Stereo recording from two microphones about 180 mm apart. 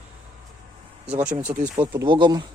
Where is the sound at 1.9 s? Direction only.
25° right (ahead or behind).